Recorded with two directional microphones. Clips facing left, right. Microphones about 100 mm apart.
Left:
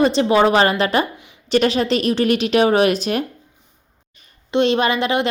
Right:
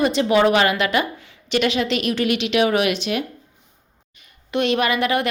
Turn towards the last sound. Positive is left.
turn(degrees=25)  # may be behind; listen again after turning